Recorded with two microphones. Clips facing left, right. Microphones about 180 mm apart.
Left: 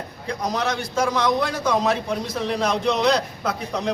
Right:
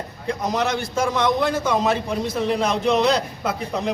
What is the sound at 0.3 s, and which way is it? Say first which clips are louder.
A man's voice: right 2 dB; 5° right (ahead or behind).